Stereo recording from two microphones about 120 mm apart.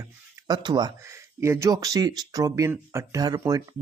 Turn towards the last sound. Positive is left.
turn(degrees=-30)  # may be behind; listen again after turning